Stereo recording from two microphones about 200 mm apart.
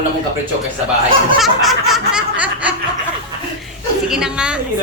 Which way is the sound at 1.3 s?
Centre (ahead or behind).